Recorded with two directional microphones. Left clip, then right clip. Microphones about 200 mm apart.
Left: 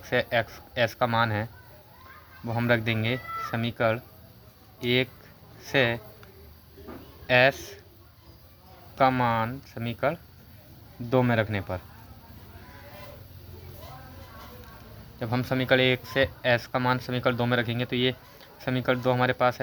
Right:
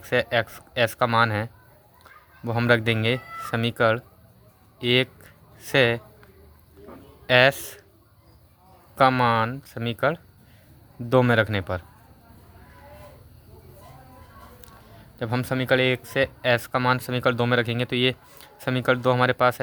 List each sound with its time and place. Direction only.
0.0 s speech: 30° right (ahead or behind)
2.5 s speech: 35° right (ahead or behind)
4.8 s a sound: 35° right (ahead or behind)
7.3 s speech: 30° right (ahead or behind)
9.0 s speech: 35° right (ahead or behind)
15.2 s speech: 25° right (ahead or behind)